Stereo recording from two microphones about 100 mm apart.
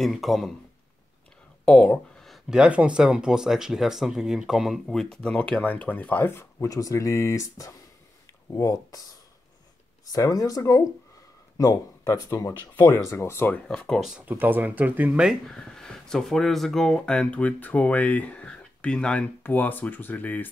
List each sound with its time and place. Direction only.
0.0 s speech: centre (ahead or behind)
1.7 s speech: 15° left (ahead or behind)
2.2 s speech: 5° right (ahead or behind); by 6.7 s 25° left (ahead or behind)
6.7 s speech: 35° left (ahead or behind)
10.0 s a man's voice: 35° left (ahead or behind)
12.9 s speech: 25° left (ahead or behind)
13.8 s speech: 5° left (ahead or behind)
14.3 s speech: 20° right (ahead or behind)
15.4 s speech: 5° left (ahead or behind)